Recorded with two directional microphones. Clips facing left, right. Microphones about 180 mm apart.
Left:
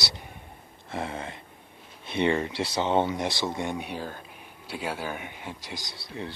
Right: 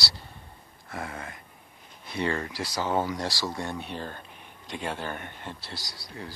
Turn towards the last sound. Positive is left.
turn(degrees=25)  # may be behind; listen again after turning